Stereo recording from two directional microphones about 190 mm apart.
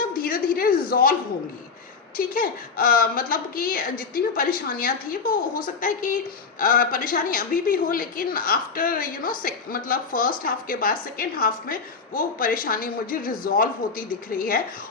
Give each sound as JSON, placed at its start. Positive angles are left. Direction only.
{"t": 0.1, "sound": "a woman's voice", "side_deg": 50}
{"t": 2.1, "sound": "a woman's voice", "side_deg": 50}